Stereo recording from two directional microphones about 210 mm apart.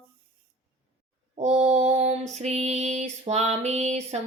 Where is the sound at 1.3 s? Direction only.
35° right (ahead or behind).